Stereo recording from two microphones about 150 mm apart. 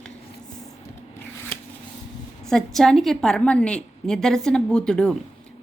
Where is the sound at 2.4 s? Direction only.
5° left (ahead or behind).